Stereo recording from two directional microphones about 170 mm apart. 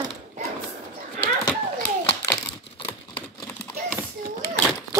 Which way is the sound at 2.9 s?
10° left (ahead or behind).